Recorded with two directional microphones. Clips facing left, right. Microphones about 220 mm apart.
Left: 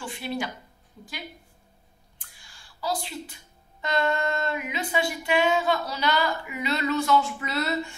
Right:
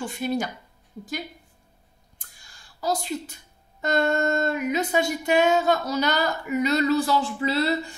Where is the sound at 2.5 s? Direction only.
45° right (ahead or behind).